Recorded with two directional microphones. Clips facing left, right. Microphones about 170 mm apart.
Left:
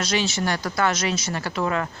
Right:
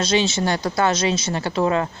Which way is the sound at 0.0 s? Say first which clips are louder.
Right 4 dB; 25° right (ahead or behind).